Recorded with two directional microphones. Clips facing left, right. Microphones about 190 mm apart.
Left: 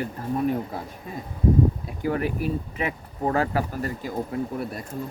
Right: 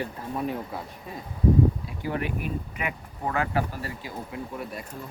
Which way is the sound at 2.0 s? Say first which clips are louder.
Left 5 dB; 40° left (ahead or behind).